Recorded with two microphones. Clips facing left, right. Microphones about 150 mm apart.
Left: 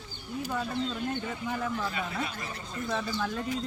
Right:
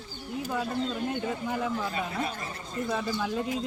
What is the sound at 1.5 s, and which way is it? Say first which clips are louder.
Speech: even; 15° right (ahead or behind).